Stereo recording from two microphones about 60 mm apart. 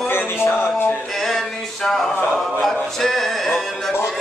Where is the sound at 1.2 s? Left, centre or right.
Centre.